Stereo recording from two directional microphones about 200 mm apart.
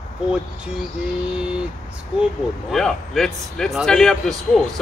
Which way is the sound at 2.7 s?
Centre (ahead or behind).